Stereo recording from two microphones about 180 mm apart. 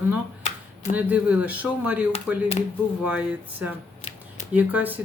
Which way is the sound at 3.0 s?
10° right (ahead or behind).